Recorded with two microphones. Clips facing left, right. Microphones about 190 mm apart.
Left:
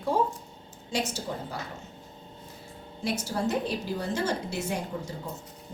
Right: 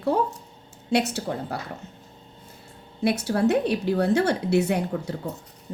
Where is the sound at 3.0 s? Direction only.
65° right (ahead or behind).